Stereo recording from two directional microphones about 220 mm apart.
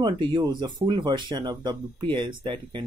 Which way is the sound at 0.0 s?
20° right (ahead or behind).